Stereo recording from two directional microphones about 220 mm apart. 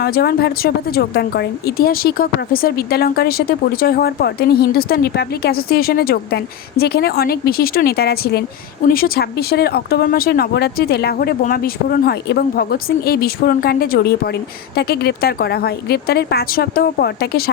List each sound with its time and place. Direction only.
0.0 s speech: 45° left (ahead or behind)